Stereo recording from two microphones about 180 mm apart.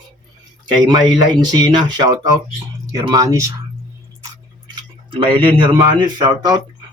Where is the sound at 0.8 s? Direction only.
25° right (ahead or behind).